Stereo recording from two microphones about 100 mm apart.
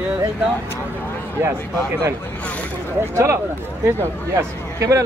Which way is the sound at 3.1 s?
25° right (ahead or behind).